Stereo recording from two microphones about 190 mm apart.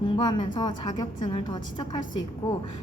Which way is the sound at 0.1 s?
20° left (ahead or behind).